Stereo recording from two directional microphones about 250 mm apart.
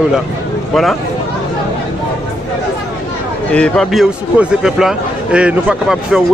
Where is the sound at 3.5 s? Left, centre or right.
Centre.